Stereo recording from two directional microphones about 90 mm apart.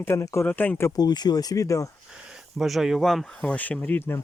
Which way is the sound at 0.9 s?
50° left (ahead or behind).